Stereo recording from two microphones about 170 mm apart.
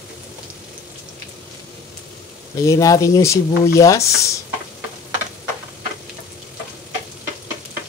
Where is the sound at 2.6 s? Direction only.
20° left (ahead or behind).